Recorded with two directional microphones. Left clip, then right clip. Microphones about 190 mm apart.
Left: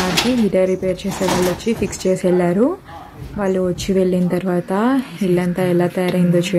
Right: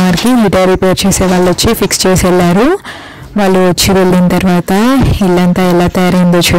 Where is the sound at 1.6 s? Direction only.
55° right (ahead or behind).